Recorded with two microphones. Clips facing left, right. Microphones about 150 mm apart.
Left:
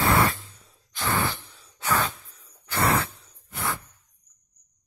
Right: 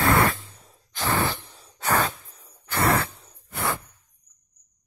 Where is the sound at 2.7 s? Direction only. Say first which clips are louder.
Right 1 dB; 65° right (ahead or behind).